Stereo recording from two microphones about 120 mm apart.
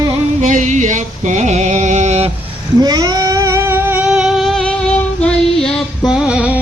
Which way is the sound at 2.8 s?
35° right (ahead or behind).